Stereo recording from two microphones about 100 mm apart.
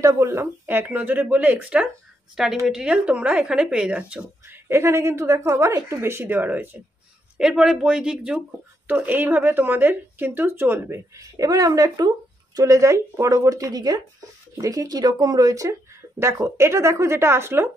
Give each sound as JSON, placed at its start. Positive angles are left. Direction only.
{"t": 0.0, "sound": "speech", "side_deg": -30}
{"t": 4.6, "sound": "speech", "side_deg": -25}
{"t": 7.3, "sound": "speech", "side_deg": -5}
{"t": 11.1, "sound": "speech", "side_deg": -35}